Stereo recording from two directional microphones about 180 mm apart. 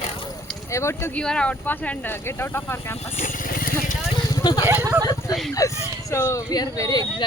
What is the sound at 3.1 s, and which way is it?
Vehicle, 50° left (ahead or behind).